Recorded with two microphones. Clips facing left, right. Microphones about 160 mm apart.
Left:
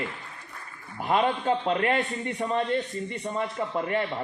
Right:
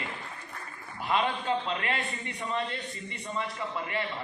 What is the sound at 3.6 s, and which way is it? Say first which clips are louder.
Speech: left 6 dB; 45° left (ahead or behind).